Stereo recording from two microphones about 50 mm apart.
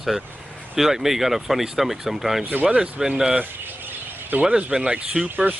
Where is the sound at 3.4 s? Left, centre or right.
Right.